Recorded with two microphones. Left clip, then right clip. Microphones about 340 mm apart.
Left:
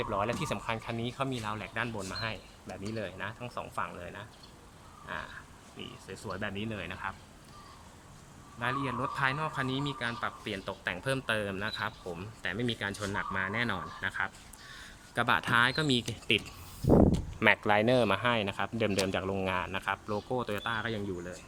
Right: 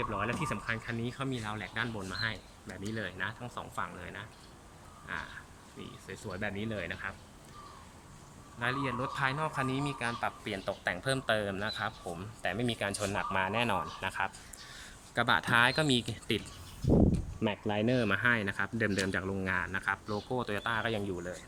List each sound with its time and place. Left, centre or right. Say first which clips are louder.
0.0 s speech: left 2 dB; centre
6.1 s speech: even; centre
8.5 s speech: even; centre
16.8 s speech: left 4 dB; left
17.7 s speech: left 5 dB; centre